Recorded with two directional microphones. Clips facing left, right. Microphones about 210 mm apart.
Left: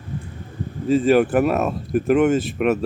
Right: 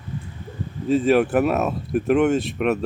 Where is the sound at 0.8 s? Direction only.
Centre (ahead or behind).